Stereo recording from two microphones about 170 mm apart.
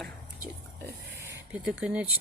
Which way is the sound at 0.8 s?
15° right (ahead or behind).